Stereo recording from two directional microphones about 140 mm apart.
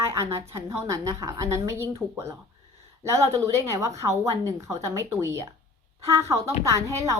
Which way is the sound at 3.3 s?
25° right (ahead or behind).